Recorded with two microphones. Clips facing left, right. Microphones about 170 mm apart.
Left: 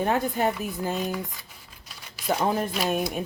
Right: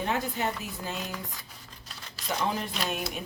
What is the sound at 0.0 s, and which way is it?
Speech, 50° left (ahead or behind).